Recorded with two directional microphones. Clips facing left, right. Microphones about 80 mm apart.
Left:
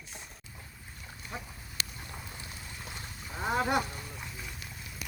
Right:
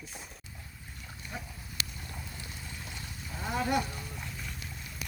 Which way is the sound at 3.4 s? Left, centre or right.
Left.